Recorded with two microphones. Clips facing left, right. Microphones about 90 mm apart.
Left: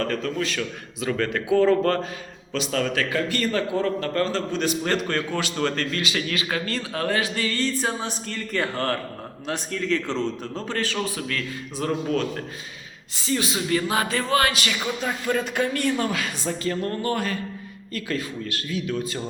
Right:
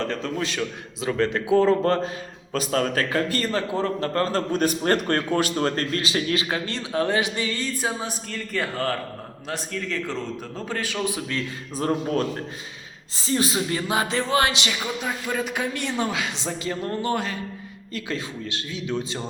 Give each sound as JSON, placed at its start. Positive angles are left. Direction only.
{"t": 0.0, "sound": "a man's voice", "side_deg": -25}
{"t": 11.8, "sound": "a man's voice", "side_deg": -35}
{"t": 15.0, "sound": "a man's voice", "side_deg": -10}